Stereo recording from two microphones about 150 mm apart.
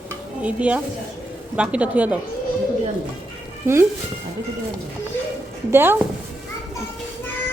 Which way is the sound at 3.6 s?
15° right (ahead or behind).